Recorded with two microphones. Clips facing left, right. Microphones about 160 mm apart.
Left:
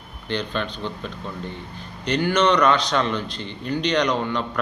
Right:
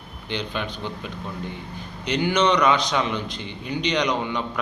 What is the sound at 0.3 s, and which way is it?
A man's voice, 15° right (ahead or behind).